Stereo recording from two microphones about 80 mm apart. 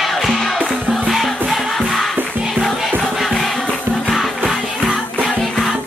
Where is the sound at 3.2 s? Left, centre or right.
Centre.